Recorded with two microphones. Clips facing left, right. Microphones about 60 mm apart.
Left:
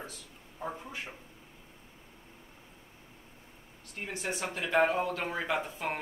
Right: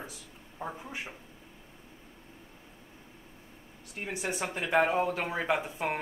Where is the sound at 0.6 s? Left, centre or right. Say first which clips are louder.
Even; centre.